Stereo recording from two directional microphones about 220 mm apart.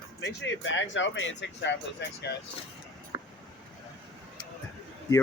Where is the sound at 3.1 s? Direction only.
15° right (ahead or behind).